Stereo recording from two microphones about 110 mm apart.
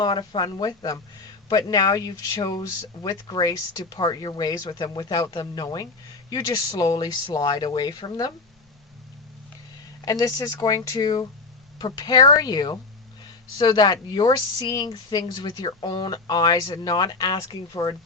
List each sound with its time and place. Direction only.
0.0 s speech: 45° left (ahead or behind)
10.1 s speech: 35° left (ahead or behind)